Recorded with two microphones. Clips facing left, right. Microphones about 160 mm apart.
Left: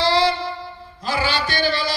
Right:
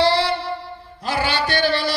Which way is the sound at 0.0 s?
60° right (ahead or behind).